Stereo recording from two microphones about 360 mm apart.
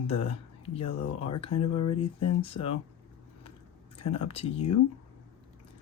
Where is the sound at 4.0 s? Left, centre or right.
Centre.